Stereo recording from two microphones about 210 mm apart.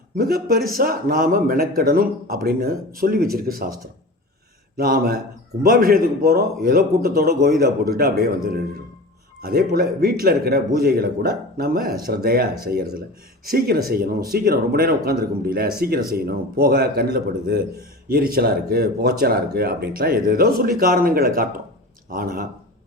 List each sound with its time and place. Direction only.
0.2 s a man's voice: 45° right (ahead or behind)
4.8 s a man's voice: 45° right (ahead or behind)